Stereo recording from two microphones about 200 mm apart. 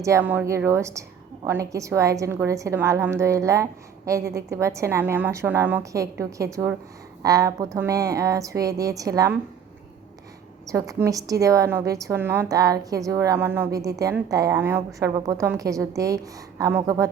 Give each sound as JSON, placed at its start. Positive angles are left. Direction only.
{"t": 0.0, "sound": "a woman's voice", "side_deg": -15}
{"t": 10.7, "sound": "a woman's voice", "side_deg": -15}